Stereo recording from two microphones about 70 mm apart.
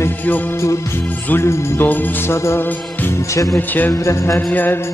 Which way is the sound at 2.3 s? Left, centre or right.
Left.